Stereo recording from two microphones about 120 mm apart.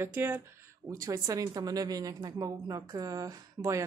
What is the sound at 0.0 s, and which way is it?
Speech, 15° right (ahead or behind).